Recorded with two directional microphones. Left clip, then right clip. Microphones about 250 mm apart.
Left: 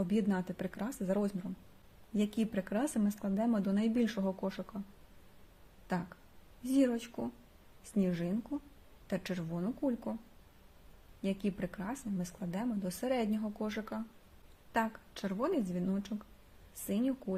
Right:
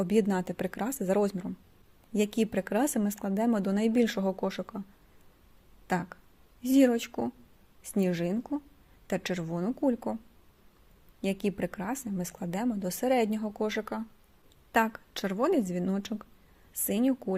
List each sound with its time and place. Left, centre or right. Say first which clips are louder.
0.0 s speech: right 8 dB; right
5.9 s speech: right 7 dB; right
11.2 s speech: right 6 dB; right